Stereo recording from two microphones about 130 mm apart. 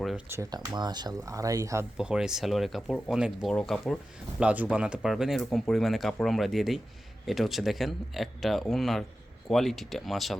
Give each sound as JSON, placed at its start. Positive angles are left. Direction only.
{"t": 0.5, "sound": "speech", "side_deg": -30}
{"t": 2.0, "sound": "speech", "side_deg": -5}
{"t": 3.5, "sound": "speech", "side_deg": 5}
{"t": 4.4, "sound": "speech", "side_deg": -10}